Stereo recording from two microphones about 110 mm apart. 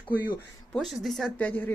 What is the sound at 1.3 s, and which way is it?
Speech, 15° left (ahead or behind).